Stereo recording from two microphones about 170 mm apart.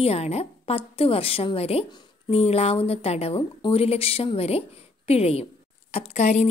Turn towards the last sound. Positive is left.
turn(degrees=40)  # may be behind; listen again after turning